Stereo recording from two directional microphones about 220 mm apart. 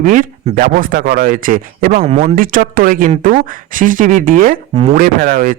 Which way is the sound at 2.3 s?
40° right (ahead or behind).